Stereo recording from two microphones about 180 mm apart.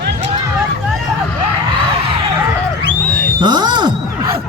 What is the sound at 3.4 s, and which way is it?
Wail, 25° right (ahead or behind).